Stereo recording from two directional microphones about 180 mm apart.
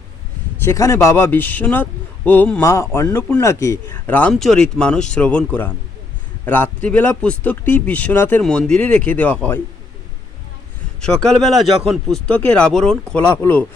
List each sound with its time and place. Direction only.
0.6 s speech: 15° left (ahead or behind)
11.0 s speech: 5° left (ahead or behind)